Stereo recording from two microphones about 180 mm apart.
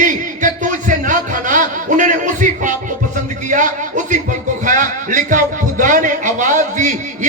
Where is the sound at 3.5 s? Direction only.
45° right (ahead or behind).